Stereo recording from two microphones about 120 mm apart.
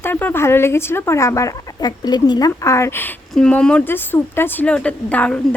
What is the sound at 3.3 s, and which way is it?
A woman's voice, 5° left (ahead or behind).